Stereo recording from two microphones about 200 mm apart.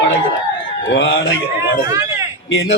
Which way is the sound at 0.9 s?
65° left (ahead or behind).